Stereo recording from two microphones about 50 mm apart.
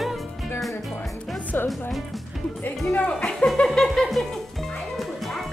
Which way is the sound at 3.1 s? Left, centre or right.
Centre.